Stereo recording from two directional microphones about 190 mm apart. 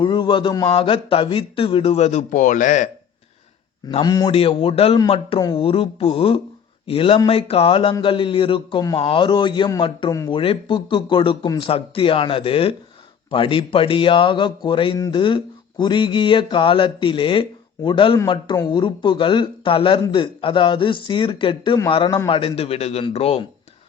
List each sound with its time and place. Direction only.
0.0 s speech: 25° left (ahead or behind); by 2.9 s 40° left (ahead or behind)
4.0 s a man's voice: 20° left (ahead or behind)